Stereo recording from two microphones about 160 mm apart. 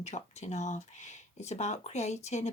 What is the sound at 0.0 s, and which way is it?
Speech, 45° left (ahead or behind).